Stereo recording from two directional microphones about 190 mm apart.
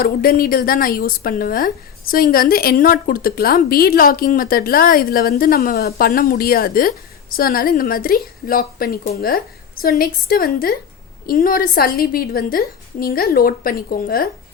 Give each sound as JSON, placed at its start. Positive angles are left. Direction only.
{"t": 0.0, "sound": "speech", "side_deg": 50}